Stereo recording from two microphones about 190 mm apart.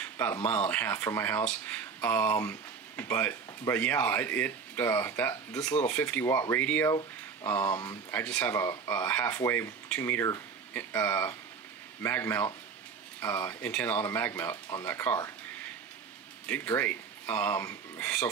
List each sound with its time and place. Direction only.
0.0 s speech: 10° left (ahead or behind)
16.4 s speech: 10° left (ahead or behind)